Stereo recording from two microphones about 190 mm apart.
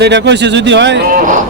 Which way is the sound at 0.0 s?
65° right (ahead or behind).